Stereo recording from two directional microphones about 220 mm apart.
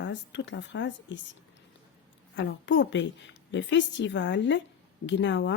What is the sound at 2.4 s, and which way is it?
A woman's voice, 55° left (ahead or behind).